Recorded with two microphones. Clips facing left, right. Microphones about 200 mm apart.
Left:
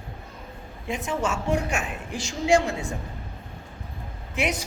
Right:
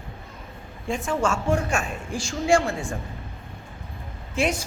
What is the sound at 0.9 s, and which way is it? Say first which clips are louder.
A woman's voice: right 3 dB; 20° left (ahead or behind).